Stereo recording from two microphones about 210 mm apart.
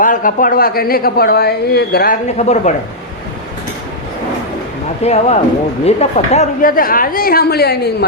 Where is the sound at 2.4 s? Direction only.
30° left (ahead or behind).